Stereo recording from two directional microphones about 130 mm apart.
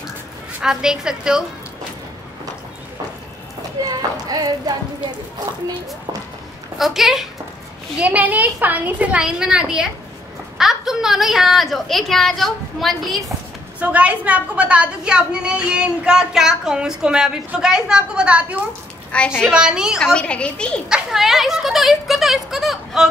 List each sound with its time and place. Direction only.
0.6 s a woman's voice: 5° right (ahead or behind)
3.8 s a sound: 30° right (ahead or behind)
6.8 s a woman's voice: centre (ahead or behind)
13.7 s a woman's voice: 10° right (ahead or behind)
19.1 s a woman's voice: 10° left (ahead or behind)
19.5 s a woman's voice: 5° right (ahead or behind)
20.2 s a woman's voice: 10° left (ahead or behind)
20.9 s a woman's voice: centre (ahead or behind)